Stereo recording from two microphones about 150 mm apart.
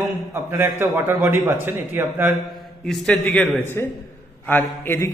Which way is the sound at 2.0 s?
Centre (ahead or behind).